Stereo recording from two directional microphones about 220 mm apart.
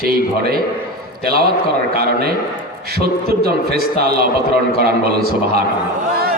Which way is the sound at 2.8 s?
45° right (ahead or behind).